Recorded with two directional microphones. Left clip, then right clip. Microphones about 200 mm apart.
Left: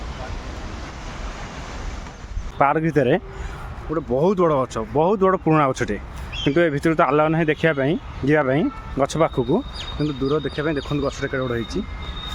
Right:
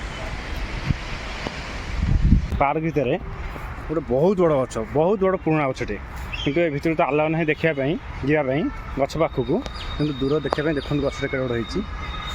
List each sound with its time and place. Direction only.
2.6 s speech: 20° left (ahead or behind)
3.9 s speech: centre (ahead or behind); by 9.6 s 15° left (ahead or behind)
10.0 s speech: 5° right (ahead or behind)